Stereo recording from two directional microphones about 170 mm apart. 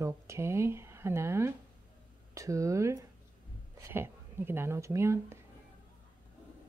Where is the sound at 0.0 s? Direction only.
15° right (ahead or behind).